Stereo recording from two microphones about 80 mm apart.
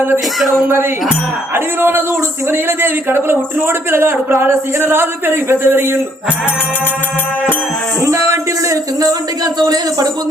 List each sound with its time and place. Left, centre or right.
1.5 s a man's voice: right
8.0 s music: right
9.6 s speech: right